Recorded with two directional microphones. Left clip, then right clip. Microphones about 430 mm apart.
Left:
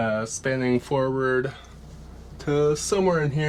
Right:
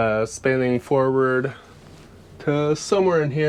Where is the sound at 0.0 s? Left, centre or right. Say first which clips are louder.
Right 5 dB; right.